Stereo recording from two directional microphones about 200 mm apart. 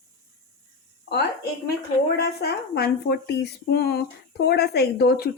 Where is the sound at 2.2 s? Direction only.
55° left (ahead or behind).